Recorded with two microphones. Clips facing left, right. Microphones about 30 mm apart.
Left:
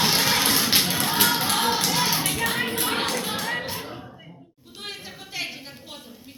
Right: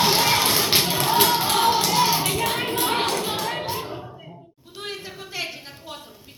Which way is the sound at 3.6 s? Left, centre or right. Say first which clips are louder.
Right 4 dB; right.